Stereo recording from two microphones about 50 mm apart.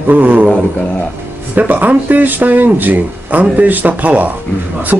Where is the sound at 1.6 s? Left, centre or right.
Right.